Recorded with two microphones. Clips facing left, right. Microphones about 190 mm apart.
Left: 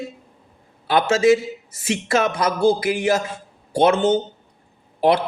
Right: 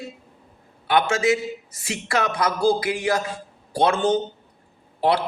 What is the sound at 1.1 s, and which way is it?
A man's voice, 25° left (ahead or behind).